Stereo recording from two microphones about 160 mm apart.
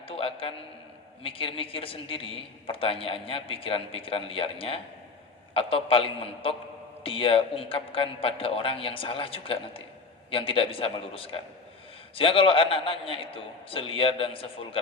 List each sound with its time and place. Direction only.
0.1 s a man's voice: 35° left (ahead or behind)